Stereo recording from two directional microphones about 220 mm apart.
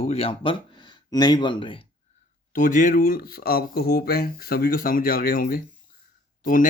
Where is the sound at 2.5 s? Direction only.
35° left (ahead or behind).